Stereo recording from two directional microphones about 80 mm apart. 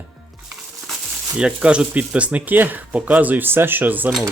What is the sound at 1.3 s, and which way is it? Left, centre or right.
Speech, centre.